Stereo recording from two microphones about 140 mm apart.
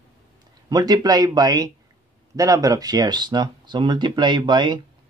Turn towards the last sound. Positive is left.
turn(degrees=-35)  # may be behind; listen again after turning